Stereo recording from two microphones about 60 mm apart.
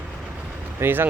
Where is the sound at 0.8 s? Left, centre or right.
Right.